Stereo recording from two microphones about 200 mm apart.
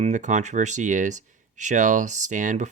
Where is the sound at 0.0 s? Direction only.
35° right (ahead or behind).